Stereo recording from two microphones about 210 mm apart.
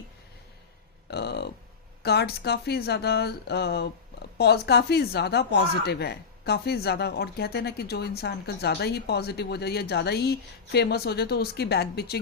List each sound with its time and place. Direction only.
1.1 s speech: 50° left (ahead or behind)